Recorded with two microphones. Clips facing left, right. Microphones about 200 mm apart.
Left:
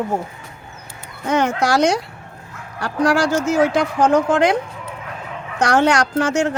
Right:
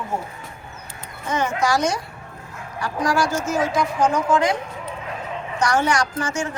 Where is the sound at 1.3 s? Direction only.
70° left (ahead or behind).